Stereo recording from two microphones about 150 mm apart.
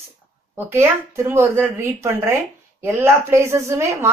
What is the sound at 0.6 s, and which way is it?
A woman's voice, 15° right (ahead or behind).